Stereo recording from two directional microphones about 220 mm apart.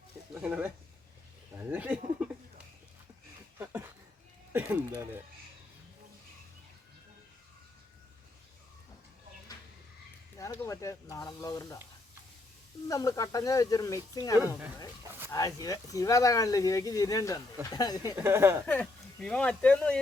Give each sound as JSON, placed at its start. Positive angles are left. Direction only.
{"t": 0.3, "sound": "speech", "side_deg": -5}
{"t": 1.5, "sound": "a sound", "side_deg": -5}
{"t": 3.6, "sound": "a sound", "side_deg": -10}
{"t": 10.3, "sound": "speech", "side_deg": 15}
{"t": 12.9, "sound": "speech", "side_deg": 15}
{"t": 18.2, "sound": "speech", "side_deg": -10}
{"t": 18.6, "sound": "speech", "side_deg": 5}